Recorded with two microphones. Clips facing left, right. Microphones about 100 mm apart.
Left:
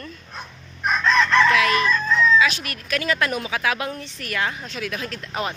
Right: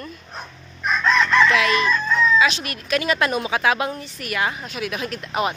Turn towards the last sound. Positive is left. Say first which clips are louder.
# right 4 dB
turn(degrees=-15)  # may be behind; listen again after turning